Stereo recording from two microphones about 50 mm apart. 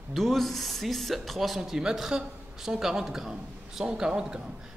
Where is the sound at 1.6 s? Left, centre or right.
Centre.